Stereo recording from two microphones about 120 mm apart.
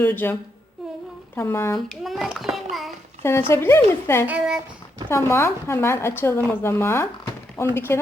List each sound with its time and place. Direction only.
0.0 s a woman's voice: 15° left (ahead or behind)
1.4 s speech: 20° left (ahead or behind)
2.0 s a sound: centre (ahead or behind)
3.2 s speech: 20° left (ahead or behind)
4.3 s speech: 10° right (ahead or behind)
5.0 s speech: 20° left (ahead or behind)